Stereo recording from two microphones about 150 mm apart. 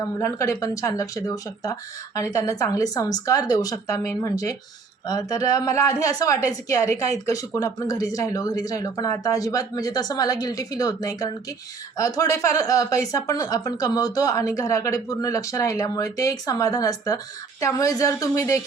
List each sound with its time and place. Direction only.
0.0 s speech: 20° left (ahead or behind)
6.8 s speech: 50° right (ahead or behind)
7.3 s speech: 25° left (ahead or behind)